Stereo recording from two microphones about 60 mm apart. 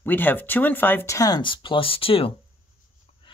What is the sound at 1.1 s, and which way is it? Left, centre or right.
Speech, left.